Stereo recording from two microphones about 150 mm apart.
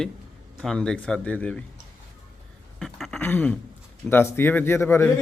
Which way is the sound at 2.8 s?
Centre (ahead or behind).